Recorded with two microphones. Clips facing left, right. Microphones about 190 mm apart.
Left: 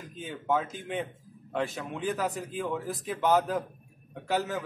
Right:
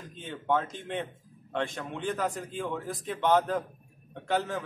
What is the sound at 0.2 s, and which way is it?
Speech, 5° left (ahead or behind).